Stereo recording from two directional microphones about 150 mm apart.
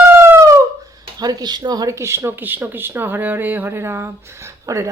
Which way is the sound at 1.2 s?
25° right (ahead or behind).